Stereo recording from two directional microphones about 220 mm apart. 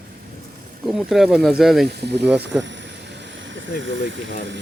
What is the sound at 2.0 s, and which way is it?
Speech, 50° right (ahead or behind).